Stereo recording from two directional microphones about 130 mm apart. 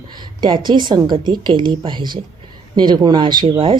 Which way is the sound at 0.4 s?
35° right (ahead or behind).